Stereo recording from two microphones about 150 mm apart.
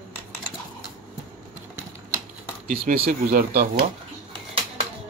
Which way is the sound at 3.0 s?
75° right (ahead or behind).